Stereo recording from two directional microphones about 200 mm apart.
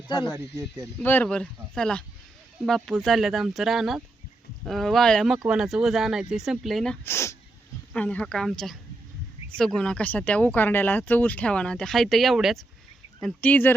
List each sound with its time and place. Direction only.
0.1 s speech: 20° left (ahead or behind)
0.3 s speech: 15° right (ahead or behind)
1.0 s speech: 10° left (ahead or behind)